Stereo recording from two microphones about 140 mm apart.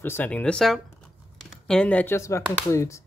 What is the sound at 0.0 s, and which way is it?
Speech, 15° left (ahead or behind).